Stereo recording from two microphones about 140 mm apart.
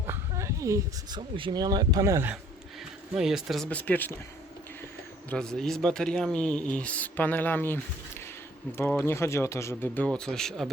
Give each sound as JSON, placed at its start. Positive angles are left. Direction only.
{"t": 0.1, "sound": "a sound", "side_deg": -20}
{"t": 1.4, "sound": "speech", "side_deg": -35}
{"t": 3.2, "sound": "speech", "side_deg": -5}
{"t": 3.7, "sound": "speech", "side_deg": 10}
{"t": 5.3, "sound": "speech", "side_deg": 5}
{"t": 9.0, "sound": "speech", "side_deg": 20}